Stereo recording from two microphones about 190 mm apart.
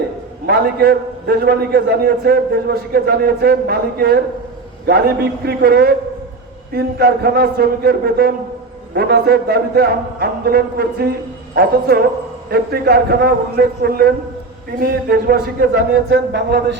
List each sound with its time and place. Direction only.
0.4 s a man's voice: 55° right (ahead or behind)
16.0 s a man's voice: 70° right (ahead or behind)